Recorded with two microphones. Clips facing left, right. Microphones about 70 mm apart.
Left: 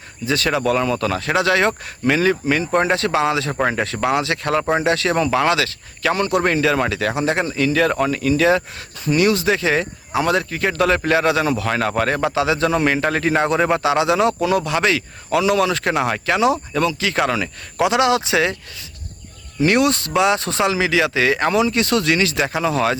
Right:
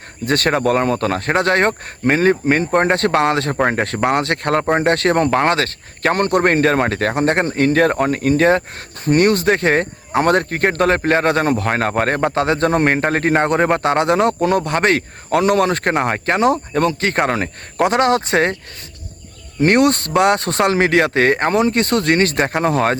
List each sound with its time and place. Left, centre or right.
0.3 s speech: right
19.5 s speech: right